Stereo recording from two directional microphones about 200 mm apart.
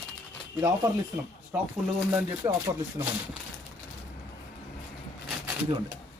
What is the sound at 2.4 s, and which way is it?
Speech, 15° right (ahead or behind).